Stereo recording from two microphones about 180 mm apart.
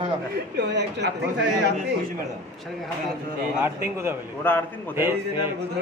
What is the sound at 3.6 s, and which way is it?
Speech, 15° right (ahead or behind).